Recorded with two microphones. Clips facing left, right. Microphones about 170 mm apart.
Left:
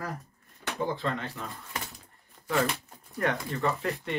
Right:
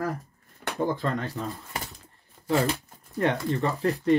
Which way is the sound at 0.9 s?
40° right (ahead or behind).